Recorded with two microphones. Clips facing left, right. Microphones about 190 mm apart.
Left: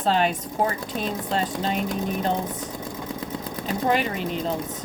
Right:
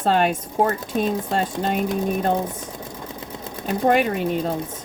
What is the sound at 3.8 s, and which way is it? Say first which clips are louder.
Speech: right 5 dB; 50° right (ahead or behind).